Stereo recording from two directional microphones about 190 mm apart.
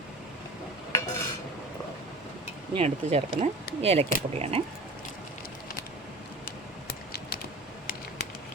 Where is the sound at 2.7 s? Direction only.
30° right (ahead or behind).